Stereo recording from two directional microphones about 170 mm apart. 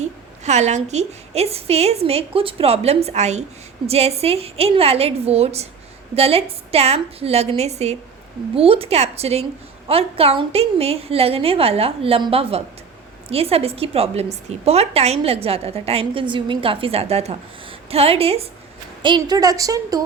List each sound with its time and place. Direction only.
0.0 s a woman's voice: 40° right (ahead or behind); by 20.1 s 20° right (ahead or behind)